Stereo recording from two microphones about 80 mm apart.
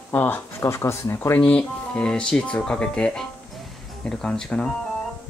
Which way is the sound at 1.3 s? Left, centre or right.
Centre.